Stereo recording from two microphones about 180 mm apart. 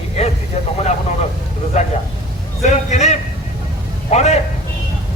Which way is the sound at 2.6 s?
40° left (ahead or behind).